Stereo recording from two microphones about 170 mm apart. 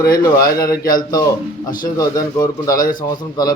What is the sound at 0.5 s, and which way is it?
Speech, 20° left (ahead or behind).